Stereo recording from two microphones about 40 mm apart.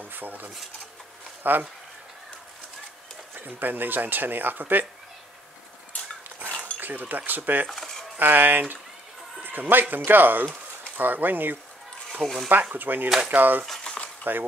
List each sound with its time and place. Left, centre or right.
0.0 s speech: right
3.3 s speech: right
6.6 s speech: right
7.7 s a sound: centre
8.2 s speech: right
12.2 s speech: centre
12.7 s speech: right
13.8 s cutlery: left